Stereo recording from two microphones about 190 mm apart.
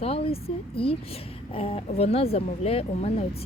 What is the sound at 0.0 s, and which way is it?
Speech, 30° left (ahead or behind).